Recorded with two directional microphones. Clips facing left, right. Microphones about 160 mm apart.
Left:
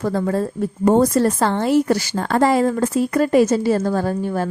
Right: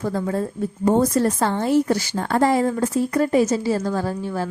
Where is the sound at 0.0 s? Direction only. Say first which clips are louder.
Left 3 dB; 70° left (ahead or behind).